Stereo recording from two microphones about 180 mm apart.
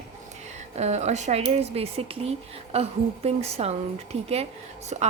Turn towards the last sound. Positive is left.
turn(degrees=-40)  # may be behind; listen again after turning